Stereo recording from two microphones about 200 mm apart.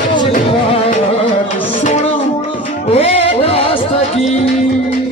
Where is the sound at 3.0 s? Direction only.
30° left (ahead or behind).